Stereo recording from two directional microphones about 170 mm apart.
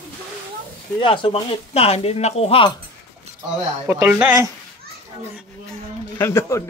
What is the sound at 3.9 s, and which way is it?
Speech, 10° right (ahead or behind).